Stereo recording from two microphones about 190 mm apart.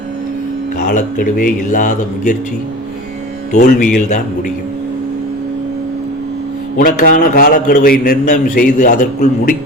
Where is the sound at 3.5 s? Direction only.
45° left (ahead or behind).